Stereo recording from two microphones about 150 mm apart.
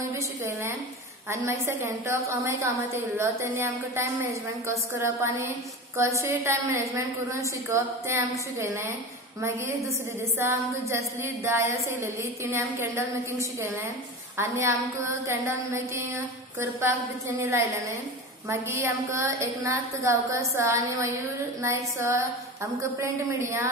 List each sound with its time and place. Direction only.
1.3 s a woman's voice: 20° right (ahead or behind)
10.4 s a woman's voice: 20° right (ahead or behind)